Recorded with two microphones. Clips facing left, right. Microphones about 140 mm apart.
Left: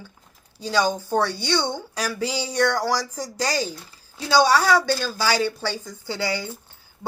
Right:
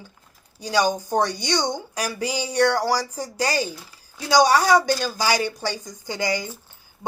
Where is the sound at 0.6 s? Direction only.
15° right (ahead or behind).